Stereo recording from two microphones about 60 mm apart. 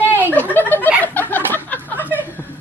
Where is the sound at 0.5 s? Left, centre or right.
Left.